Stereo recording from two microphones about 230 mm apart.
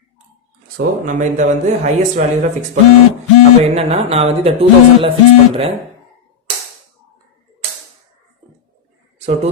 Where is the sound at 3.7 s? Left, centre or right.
Right.